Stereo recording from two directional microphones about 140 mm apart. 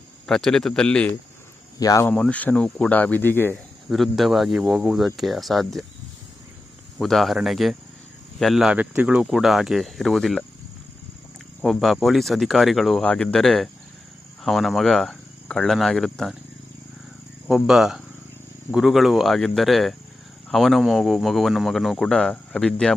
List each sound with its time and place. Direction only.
0.3 s speech: 5° left (ahead or behind)
1.8 s speech: 25° left (ahead or behind)
2.0 s speech: 10° left (ahead or behind)
3.8 s speech: centre (ahead or behind)
7.0 s speech: centre (ahead or behind)
11.6 s speech: centre (ahead or behind)
14.4 s cricket: centre (ahead or behind)
17.7 s speech: 5° right (ahead or behind)